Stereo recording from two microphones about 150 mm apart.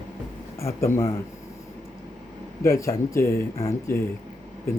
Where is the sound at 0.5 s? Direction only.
20° left (ahead or behind).